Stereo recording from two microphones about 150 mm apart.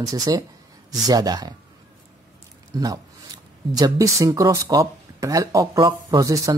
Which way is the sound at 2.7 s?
25° right (ahead or behind).